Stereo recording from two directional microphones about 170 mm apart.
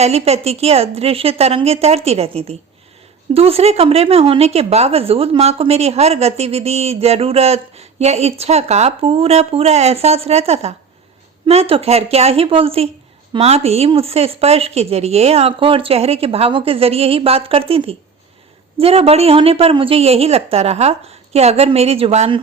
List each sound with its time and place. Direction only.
0.0 s speech: 40° right (ahead or behind)